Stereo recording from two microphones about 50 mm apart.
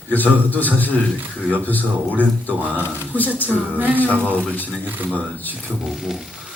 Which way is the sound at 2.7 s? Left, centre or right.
Left.